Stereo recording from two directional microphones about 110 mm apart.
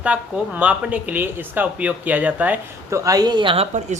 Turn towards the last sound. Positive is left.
turn(degrees=-90)